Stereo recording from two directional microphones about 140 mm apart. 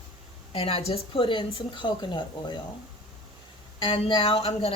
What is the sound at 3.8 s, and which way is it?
Speech, 40° left (ahead or behind).